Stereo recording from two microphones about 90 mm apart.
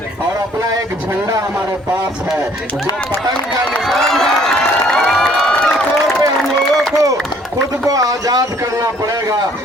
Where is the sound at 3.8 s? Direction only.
5° left (ahead or behind).